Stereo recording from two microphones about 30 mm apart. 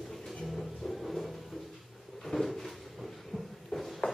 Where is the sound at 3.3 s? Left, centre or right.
Right.